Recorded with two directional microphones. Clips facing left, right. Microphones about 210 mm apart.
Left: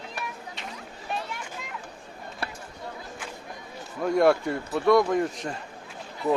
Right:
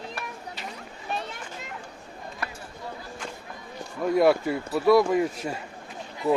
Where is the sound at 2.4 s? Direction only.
30° left (ahead or behind).